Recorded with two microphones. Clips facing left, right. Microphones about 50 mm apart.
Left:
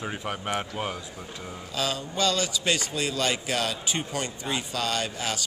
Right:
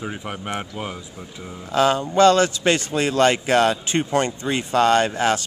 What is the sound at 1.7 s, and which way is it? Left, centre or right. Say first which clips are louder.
A man's voice: right 12 dB; right.